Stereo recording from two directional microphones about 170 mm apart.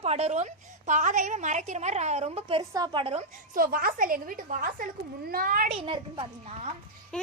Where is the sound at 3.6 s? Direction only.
55° right (ahead or behind).